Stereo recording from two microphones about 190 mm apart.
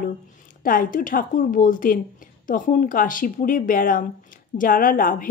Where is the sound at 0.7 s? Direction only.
45° left (ahead or behind).